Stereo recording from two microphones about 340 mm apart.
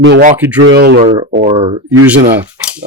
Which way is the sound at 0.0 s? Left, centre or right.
Right.